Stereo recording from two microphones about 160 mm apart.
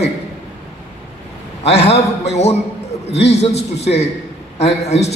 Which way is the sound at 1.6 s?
40° left (ahead or behind).